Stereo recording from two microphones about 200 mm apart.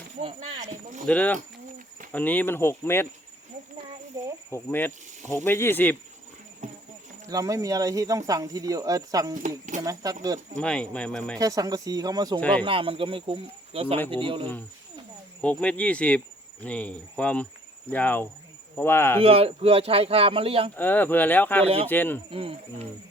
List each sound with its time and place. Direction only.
0.2 s a sound: 25° right (ahead or behind)
1.0 s speech: 5° left (ahead or behind)
4.5 s speech: 10° left (ahead or behind)
6.6 s clip-clop: 35° right (ahead or behind)
7.3 s speech: 15° right (ahead or behind)
10.6 s speech: 5° left (ahead or behind)
11.3 s speech: 15° right (ahead or behind)
12.4 s speech: 5° left (ahead or behind)
12.6 s speech: 25° right (ahead or behind)
15.4 s speech: 5° left (ahead or behind)
19.2 s speech: 30° right (ahead or behind)
20.7 s speech: 10° left (ahead or behind)
22.3 s speech: 25° right (ahead or behind)